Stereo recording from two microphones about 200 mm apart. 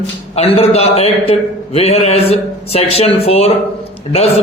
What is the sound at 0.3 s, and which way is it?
A man's voice, 30° left (ahead or behind).